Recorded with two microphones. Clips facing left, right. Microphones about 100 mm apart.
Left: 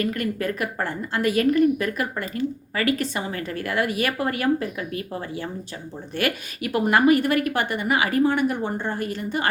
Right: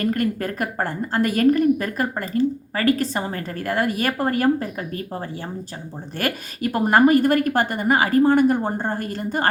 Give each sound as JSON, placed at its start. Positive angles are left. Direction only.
{"t": 0.0, "sound": "a woman's voice", "side_deg": -40}